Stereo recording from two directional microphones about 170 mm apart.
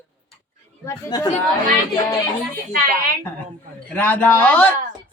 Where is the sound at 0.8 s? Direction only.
25° left (ahead or behind).